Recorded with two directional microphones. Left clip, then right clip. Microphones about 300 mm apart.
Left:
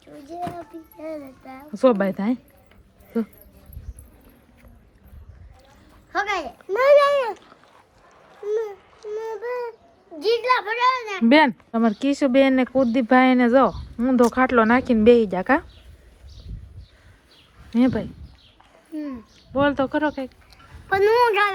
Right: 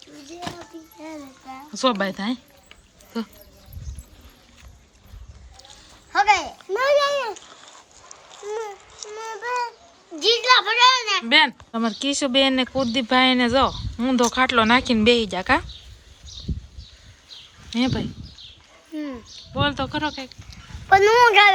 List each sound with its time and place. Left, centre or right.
1.5 s speech: centre
6.1 s a child's voice: centre
6.7 s a child's voice: left
10.2 s a child's voice: centre
11.3 s speech: centre
17.7 s speech: centre
19.5 s a woman's voice: centre